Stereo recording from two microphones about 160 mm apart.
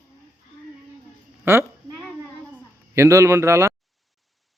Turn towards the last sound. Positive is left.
turn(degrees=-20)  # may be behind; listen again after turning